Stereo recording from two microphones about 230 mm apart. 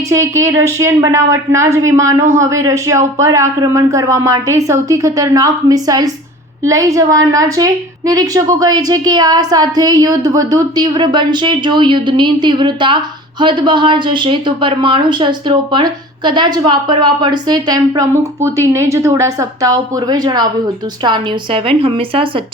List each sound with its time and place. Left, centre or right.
0.1 s a woman's voice: centre